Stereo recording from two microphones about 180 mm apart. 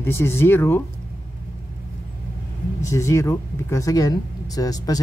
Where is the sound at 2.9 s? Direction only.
15° left (ahead or behind).